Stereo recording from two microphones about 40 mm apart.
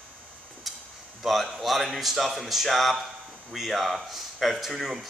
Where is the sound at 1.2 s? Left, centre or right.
Centre.